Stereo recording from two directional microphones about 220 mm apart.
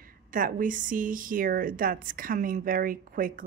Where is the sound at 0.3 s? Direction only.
40° right (ahead or behind).